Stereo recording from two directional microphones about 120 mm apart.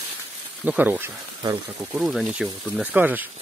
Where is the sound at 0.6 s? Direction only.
15° right (ahead or behind).